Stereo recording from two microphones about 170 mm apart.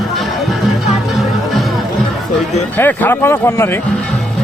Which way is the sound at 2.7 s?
10° left (ahead or behind).